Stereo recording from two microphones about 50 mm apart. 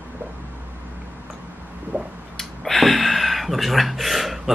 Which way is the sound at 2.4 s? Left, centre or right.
Centre.